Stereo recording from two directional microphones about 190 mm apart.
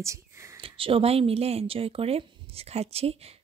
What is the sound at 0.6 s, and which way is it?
Speech, 30° right (ahead or behind).